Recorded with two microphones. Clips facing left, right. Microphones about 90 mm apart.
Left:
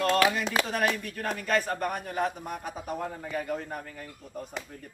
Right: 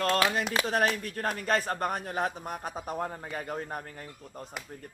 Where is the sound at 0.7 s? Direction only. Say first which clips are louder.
Right 1 dB; 45° right (ahead or behind).